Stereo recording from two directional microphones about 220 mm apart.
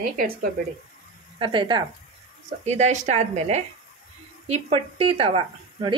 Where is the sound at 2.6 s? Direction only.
30° right (ahead or behind).